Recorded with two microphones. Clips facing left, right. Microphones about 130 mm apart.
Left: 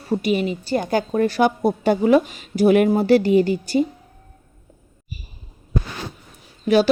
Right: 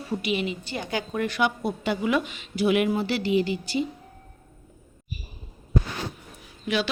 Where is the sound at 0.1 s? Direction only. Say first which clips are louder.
Left 7 dB; 40° left (ahead or behind).